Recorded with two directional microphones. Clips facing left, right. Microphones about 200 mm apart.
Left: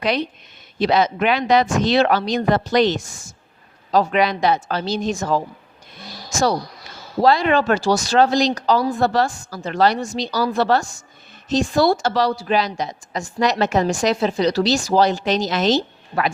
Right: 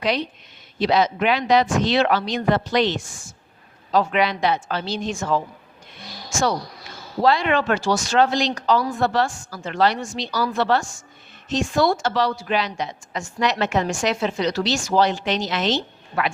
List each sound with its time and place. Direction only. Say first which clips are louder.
0.8 s a woman's voice: left 2 dB; 50° left (ahead or behind)